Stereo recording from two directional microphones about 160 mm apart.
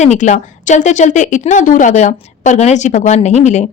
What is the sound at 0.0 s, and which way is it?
A woman's voice, 45° left (ahead or behind).